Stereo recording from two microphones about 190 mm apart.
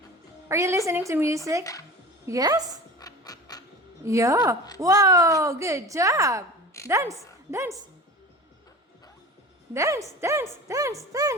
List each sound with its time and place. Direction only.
0.4 s a woman's voice: 15° right (ahead or behind)
3.0 s a sound: 20° left (ahead or behind)
4.0 s a woman's voice: 15° right (ahead or behind)
9.7 s a woman's voice: 15° right (ahead or behind)